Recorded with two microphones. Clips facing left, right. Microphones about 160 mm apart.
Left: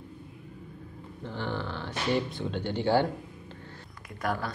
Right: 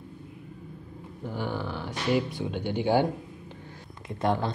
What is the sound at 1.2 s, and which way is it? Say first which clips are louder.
Speech: right 2 dB; 10° right (ahead or behind).